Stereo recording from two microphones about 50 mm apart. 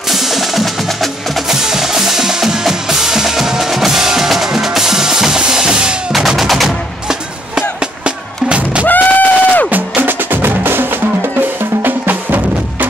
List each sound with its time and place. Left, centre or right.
0.1 s percussion: centre
1.5 s percussion: centre
6.1 s music: centre
7.8 s music: right
8.8 s a sound: left
9.7 s percussion: right